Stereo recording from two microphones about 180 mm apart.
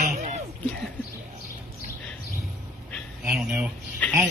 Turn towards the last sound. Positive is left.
turn(degrees=10)  # may be behind; listen again after turning